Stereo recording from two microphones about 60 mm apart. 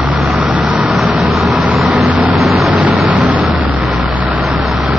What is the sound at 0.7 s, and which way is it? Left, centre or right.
Vehicle, centre.